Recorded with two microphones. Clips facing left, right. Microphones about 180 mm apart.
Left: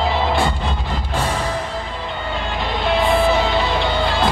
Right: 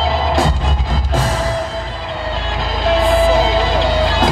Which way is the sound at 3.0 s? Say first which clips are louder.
Right 3 dB; 40° right (ahead or behind).